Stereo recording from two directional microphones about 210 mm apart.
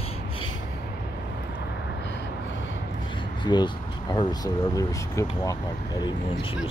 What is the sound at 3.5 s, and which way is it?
Speech, 20° left (ahead or behind).